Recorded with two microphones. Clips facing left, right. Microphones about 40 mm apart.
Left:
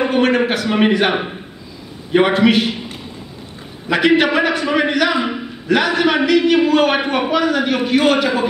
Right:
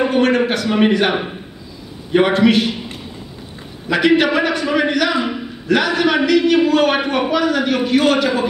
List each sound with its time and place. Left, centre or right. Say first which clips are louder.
0.0 s a man's voice: even; centre
3.9 s a man's voice: even; centre